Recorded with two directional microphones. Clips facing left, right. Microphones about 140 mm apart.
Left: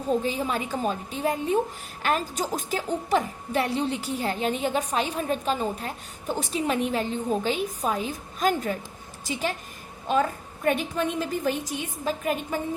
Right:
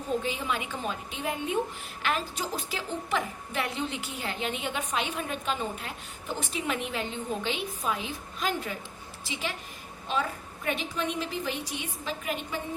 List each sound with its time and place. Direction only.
0.2 s a woman's voice: 40° left (ahead or behind)